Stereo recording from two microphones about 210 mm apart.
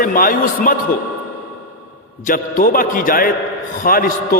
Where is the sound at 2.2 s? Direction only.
40° left (ahead or behind).